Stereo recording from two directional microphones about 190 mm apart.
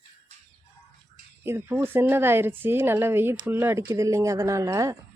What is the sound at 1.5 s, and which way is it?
A woman's voice, 10° right (ahead or behind).